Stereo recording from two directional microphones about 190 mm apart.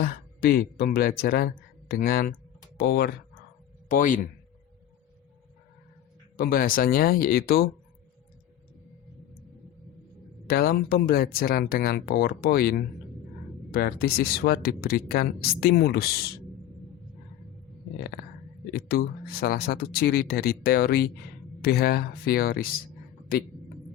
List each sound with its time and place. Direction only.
0.0 s speech: 50° left (ahead or behind)
3.8 s speech: 45° left (ahead or behind)
6.3 s speech: 50° left (ahead or behind)
10.4 s speech: 50° left (ahead or behind)
18.7 s speech: 55° left (ahead or behind)